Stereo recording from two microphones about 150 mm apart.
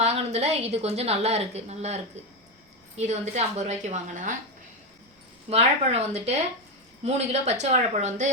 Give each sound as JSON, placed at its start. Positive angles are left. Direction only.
{"t": 0.0, "sound": "a woman's voice", "side_deg": -45}
{"t": 5.5, "sound": "a woman's voice", "side_deg": -45}